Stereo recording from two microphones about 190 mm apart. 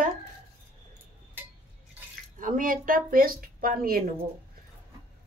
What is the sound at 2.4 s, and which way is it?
Speech, 45° right (ahead or behind).